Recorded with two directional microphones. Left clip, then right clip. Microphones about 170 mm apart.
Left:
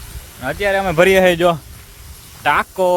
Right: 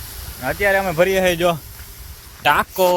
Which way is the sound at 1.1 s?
30° left (ahead or behind).